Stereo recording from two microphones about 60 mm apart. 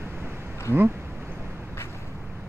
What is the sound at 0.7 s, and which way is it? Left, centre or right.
Speech, right.